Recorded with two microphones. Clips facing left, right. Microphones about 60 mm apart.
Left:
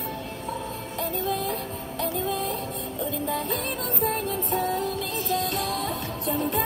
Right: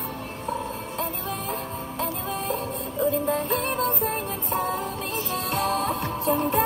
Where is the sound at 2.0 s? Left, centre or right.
Right.